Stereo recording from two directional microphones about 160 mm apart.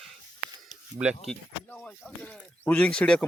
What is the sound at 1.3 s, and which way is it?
Speech, 10° left (ahead or behind).